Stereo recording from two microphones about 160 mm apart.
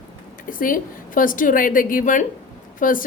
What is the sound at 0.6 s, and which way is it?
A woman's voice, 60° left (ahead or behind).